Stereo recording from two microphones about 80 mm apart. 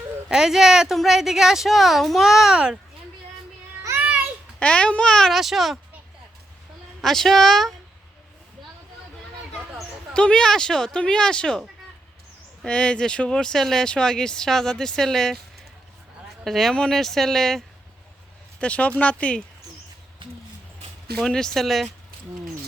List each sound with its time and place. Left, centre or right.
0.3 s speech: centre
4.6 s speech: centre
7.0 s speech: centre
9.5 s speech: centre
12.6 s speech: centre
16.4 s speech: centre
18.6 s speech: centre
21.2 s speech: centre